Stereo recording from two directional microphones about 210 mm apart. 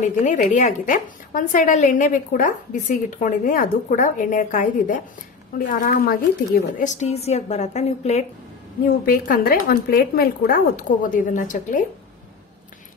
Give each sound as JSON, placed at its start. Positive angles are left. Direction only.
{"t": 0.0, "sound": "speech", "side_deg": 35}
{"t": 9.0, "sound": "speech", "side_deg": 45}